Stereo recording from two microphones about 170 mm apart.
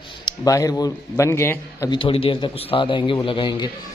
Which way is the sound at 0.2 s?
20° left (ahead or behind).